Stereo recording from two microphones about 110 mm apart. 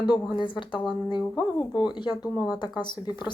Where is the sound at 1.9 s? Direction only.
40° left (ahead or behind).